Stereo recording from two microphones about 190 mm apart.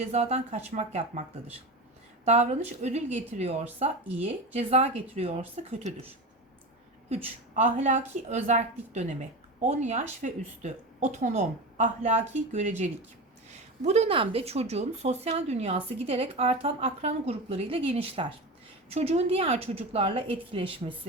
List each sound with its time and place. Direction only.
0.0 s speech: 35° right (ahead or behind)
7.1 s speech: 35° right (ahead or behind)